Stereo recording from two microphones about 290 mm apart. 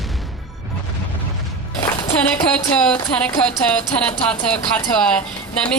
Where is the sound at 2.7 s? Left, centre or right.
Centre.